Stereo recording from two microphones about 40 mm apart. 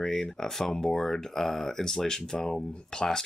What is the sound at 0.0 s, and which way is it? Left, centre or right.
Speech, centre.